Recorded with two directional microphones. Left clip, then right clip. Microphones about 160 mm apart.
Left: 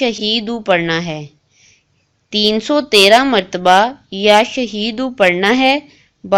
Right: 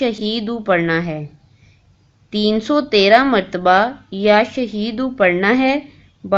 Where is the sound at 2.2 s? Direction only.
25° left (ahead or behind).